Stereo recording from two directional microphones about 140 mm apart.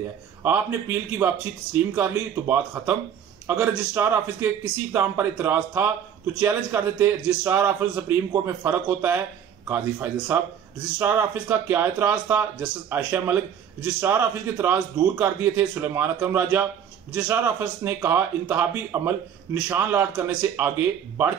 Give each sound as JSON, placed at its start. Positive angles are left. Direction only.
{"t": 0.4, "sound": "speech", "side_deg": -15}